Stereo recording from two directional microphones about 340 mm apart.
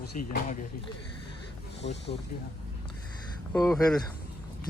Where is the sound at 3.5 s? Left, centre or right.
Centre.